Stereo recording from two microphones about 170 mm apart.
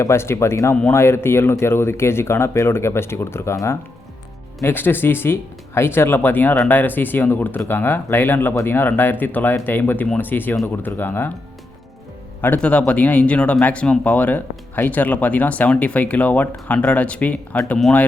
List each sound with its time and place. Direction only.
0.0 s speech: 15° left (ahead or behind)
12.4 s speech: 10° left (ahead or behind)